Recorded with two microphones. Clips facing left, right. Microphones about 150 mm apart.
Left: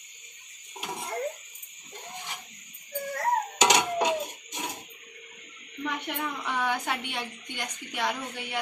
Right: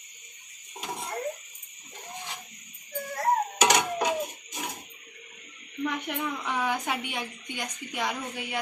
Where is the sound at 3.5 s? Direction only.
20° left (ahead or behind).